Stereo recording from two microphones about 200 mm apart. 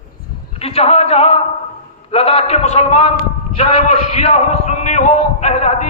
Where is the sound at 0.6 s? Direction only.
30° left (ahead or behind).